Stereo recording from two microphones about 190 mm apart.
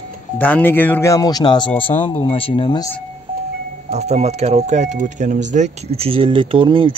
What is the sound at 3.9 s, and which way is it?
Speech, 35° right (ahead or behind).